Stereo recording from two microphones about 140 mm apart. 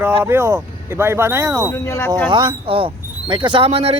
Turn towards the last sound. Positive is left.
turn(degrees=-45)  # may be behind; listen again after turning